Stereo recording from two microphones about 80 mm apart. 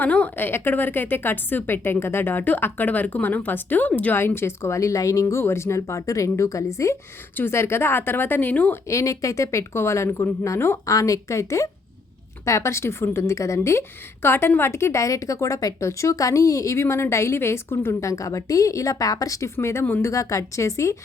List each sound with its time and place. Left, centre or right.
0.0 s a woman's voice: centre
8.9 s a woman's voice: left
19.5 s a woman's voice: left
20.1 s a woman's voice: left